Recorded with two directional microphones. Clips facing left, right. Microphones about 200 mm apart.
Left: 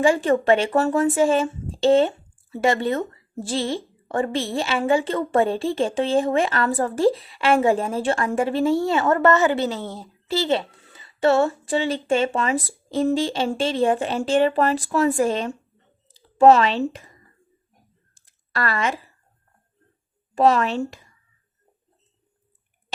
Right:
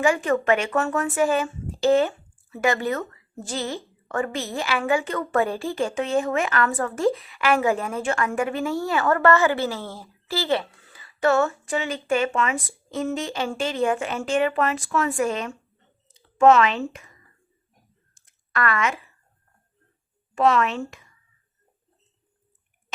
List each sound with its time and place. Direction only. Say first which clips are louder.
0.0 s a woman's voice: left 3 dB; 30° left (ahead or behind)
18.3 s a sound: right 1 dB; 30° left (ahead or behind)
20.3 s speech: left 2 dB; 35° left (ahead or behind)